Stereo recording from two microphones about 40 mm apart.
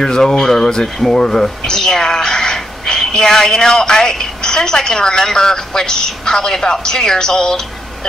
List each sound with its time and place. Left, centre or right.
0.0 s speech: centre